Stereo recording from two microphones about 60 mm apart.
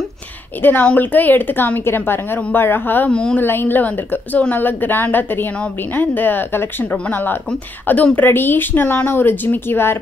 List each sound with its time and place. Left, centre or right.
0.6 s a woman's voice: left
3.1 s a woman's voice: centre
3.3 s a woman's voice: left